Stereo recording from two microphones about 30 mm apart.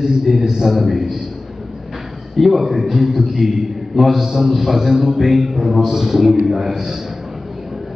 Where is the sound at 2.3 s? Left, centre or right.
Centre.